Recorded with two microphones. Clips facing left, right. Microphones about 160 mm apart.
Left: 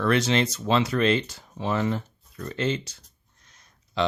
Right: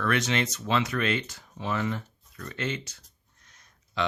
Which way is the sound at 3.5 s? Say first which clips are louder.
Left 4 dB; 30° left (ahead or behind).